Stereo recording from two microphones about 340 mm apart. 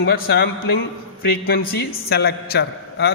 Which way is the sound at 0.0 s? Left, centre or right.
Left.